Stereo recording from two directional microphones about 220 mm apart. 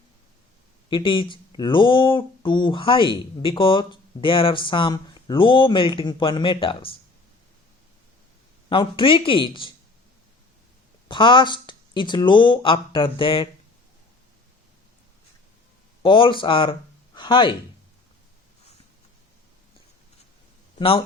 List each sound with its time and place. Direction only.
0.9 s speech: 20° left (ahead or behind)
8.7 s speech: 25° left (ahead or behind)
11.1 s speech: 20° left (ahead or behind)
16.0 s speech: 25° left (ahead or behind)
20.7 s speech: 25° left (ahead or behind)